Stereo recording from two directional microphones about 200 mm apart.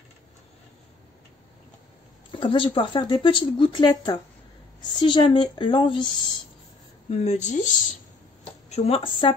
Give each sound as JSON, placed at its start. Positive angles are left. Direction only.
{"t": 2.3, "sound": "speech", "side_deg": 25}